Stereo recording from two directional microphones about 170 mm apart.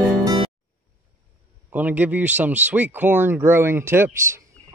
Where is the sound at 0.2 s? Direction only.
25° right (ahead or behind).